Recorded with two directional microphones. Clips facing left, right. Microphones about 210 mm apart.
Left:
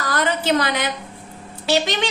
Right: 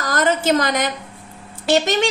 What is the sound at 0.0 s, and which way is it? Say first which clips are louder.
A woman's voice: right 3 dB; 45° right (ahead or behind).